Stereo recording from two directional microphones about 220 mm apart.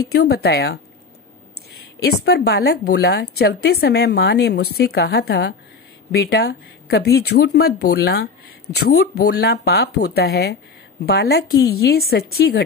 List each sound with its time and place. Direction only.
0.1 s speech: 45° left (ahead or behind)
2.0 s speech: 45° left (ahead or behind)